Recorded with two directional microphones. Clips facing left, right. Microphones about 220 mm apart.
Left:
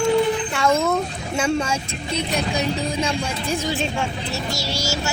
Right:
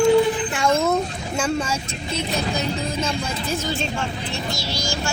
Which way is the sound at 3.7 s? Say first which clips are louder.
Left 2 dB; centre (ahead or behind).